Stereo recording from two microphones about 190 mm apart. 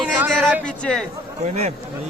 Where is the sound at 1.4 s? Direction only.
35° right (ahead or behind).